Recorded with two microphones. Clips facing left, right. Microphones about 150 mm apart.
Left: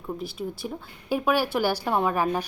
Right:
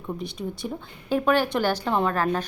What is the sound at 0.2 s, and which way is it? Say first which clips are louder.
A woman's voice: right 1 dB; 5° left (ahead or behind).